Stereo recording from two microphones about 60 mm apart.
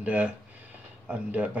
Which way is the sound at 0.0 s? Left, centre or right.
Right.